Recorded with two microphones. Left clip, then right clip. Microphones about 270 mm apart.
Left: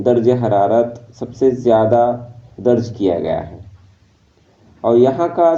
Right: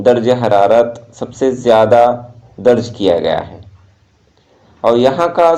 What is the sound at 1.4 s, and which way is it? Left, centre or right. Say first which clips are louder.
Speech: even; right.